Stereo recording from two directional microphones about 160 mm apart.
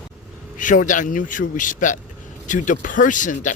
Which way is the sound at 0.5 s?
55° left (ahead or behind).